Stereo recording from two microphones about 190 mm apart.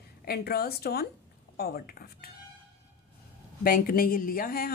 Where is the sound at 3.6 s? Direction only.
50° left (ahead or behind).